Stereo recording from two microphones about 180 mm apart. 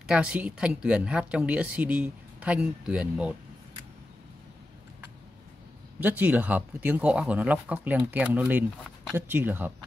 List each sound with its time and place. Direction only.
0.0 s speech: 5° right (ahead or behind)
5.9 s speech: 10° right (ahead or behind)